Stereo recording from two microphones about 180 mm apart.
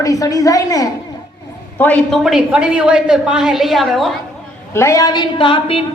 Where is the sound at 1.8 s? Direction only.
10° left (ahead or behind).